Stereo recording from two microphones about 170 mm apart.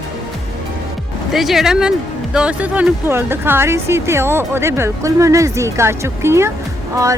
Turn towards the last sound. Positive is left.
turn(degrees=-20)  # may be behind; listen again after turning